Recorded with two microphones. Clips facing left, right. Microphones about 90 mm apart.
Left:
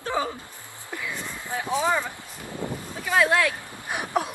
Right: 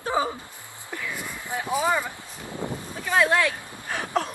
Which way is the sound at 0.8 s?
10° left (ahead or behind).